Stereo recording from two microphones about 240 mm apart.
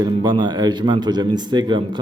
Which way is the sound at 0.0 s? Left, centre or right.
Centre.